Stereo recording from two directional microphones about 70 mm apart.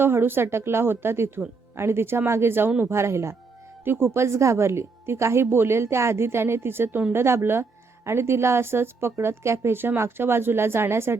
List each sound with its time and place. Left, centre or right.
0.0 s a woman's voice: right